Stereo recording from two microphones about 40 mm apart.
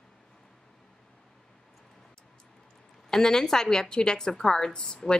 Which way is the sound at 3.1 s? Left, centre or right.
Centre.